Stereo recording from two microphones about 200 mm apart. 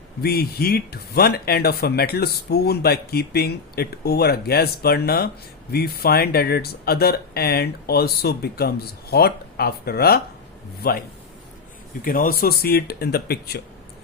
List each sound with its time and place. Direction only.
0.2 s speech: 50° left (ahead or behind)
12.0 s speech: 45° left (ahead or behind)